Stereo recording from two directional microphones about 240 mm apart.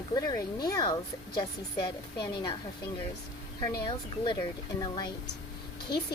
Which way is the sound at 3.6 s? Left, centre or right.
Centre.